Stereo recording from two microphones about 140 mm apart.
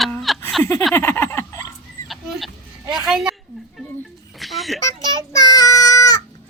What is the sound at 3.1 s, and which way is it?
Speech, 5° right (ahead or behind).